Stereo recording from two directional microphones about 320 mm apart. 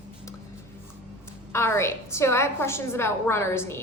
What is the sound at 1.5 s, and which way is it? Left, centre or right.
A woman's voice, centre.